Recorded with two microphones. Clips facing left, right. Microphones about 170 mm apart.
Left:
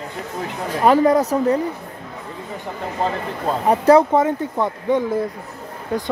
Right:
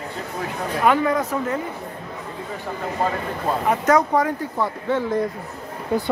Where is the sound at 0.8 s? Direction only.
35° left (ahead or behind).